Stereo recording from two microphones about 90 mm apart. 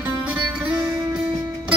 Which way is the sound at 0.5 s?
10° right (ahead or behind).